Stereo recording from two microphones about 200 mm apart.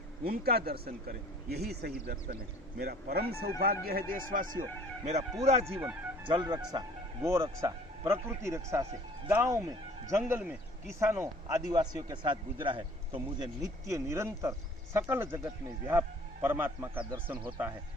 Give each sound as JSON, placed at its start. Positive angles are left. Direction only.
{"t": 0.3, "sound": "a man's voice", "side_deg": -50}
{"t": 5.0, "sound": "speech", "side_deg": -35}
{"t": 5.6, "sound": "a man's voice", "side_deg": -10}
{"t": 6.2, "sound": "a man's voice", "side_deg": -20}